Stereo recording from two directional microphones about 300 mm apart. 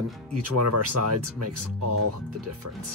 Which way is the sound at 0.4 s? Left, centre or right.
Right.